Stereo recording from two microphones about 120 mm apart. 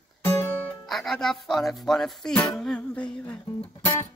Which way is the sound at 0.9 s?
Centre (ahead or behind).